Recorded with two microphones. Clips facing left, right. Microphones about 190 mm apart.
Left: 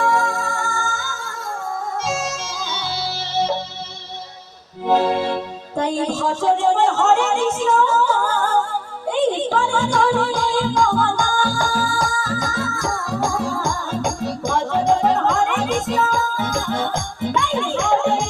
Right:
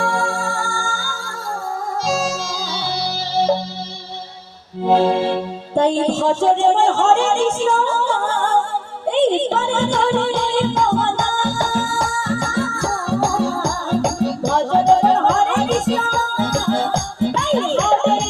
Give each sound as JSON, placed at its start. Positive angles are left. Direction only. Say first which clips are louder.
{"t": 0.0, "sound": "music", "louder": "left 1 dB", "side_deg": -30}
{"t": 4.8, "sound": "music", "louder": "right 3 dB", "side_deg": -30}